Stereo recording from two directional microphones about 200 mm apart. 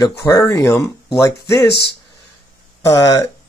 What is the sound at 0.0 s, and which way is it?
Speech, 15° left (ahead or behind).